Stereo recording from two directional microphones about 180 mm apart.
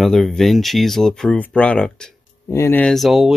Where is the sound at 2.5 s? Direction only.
15° left (ahead or behind).